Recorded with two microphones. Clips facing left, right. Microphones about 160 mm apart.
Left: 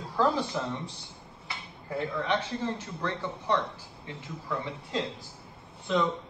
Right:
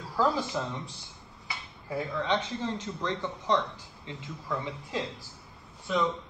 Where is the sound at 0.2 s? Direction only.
10° right (ahead or behind).